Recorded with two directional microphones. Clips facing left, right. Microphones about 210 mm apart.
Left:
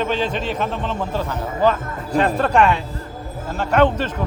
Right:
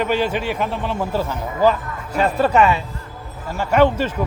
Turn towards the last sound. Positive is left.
turn(degrees=-10)  # may be behind; listen again after turning